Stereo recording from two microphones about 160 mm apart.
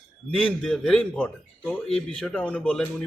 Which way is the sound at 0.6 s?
5° left (ahead or behind).